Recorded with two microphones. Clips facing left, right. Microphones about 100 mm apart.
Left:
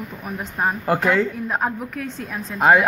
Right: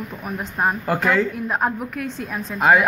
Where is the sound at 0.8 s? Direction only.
25° left (ahead or behind).